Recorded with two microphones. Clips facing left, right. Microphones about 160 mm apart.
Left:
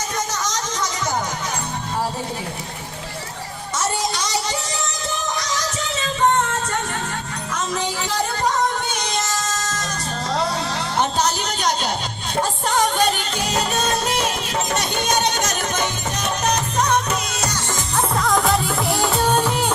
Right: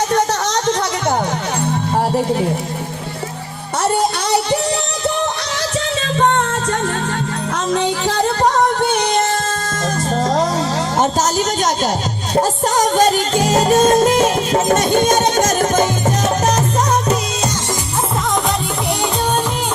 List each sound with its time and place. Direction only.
0.1 s music: 65° right (ahead or behind)
3.8 s music: 60° right (ahead or behind)
7.5 s music: 65° right (ahead or behind)
11.0 s music: 45° right (ahead or behind)